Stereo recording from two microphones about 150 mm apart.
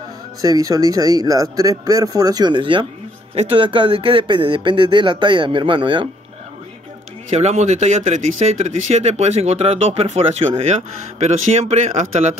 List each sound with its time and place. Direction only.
0.4 s speech: 25° right (ahead or behind)
7.2 s speech: 50° right (ahead or behind)